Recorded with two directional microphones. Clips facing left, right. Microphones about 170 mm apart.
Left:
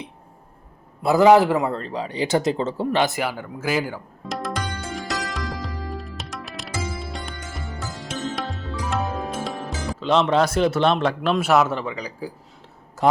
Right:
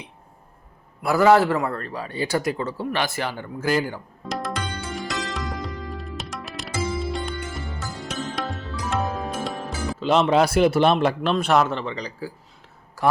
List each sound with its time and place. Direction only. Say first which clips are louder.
1.0 s speech: left 2 dB; 15° left (ahead or behind); by 4.5 s centre (ahead or behind)
4.9 s music: even; centre (ahead or behind)
8.9 s speech: right 1 dB; centre (ahead or behind)
13.0 s a sound: left 2 dB; 20° left (ahead or behind)